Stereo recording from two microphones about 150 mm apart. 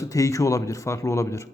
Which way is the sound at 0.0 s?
20° left (ahead or behind).